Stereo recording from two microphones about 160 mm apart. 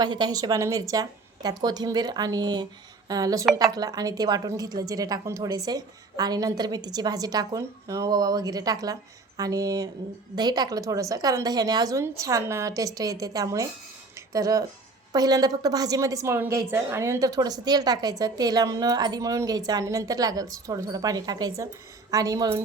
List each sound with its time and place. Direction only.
0.0 s a woman's voice: 25° right (ahead or behind)